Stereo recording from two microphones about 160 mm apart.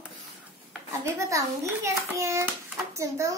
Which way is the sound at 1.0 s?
20° right (ahead or behind).